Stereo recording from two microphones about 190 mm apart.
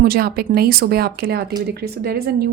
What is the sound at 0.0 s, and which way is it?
Speech, 55° right (ahead or behind).